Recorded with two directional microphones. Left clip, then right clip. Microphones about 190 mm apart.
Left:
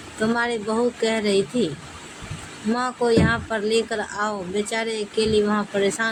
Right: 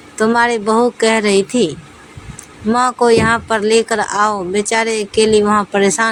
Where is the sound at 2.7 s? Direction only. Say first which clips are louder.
Right 9 dB; 50° right (ahead or behind).